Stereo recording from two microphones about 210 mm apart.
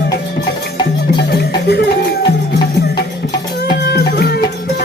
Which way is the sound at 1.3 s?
50° left (ahead or behind).